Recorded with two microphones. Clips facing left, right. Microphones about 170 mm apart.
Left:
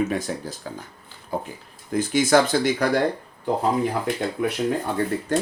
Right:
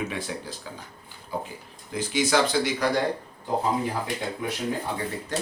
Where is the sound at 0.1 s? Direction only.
45° left (ahead or behind).